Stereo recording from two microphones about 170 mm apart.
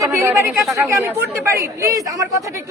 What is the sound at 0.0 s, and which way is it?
Speech, 15° right (ahead or behind).